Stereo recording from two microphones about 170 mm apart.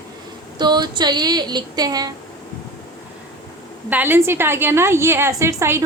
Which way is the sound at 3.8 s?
10° right (ahead or behind).